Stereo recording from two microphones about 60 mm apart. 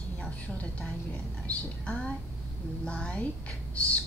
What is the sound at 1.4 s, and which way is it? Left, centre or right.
A woman's voice, centre.